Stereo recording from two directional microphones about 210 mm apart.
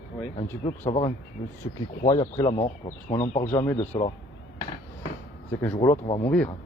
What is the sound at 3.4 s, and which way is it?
Speech, 15° left (ahead or behind).